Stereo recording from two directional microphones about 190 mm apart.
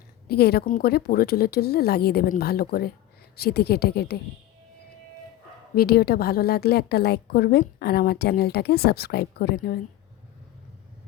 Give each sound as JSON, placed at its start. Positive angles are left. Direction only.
{"t": 0.3, "sound": "a woman's voice", "side_deg": 55}
{"t": 5.7, "sound": "a woman's voice", "side_deg": 55}